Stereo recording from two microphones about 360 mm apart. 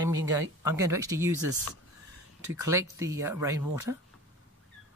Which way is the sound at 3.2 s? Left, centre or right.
Centre.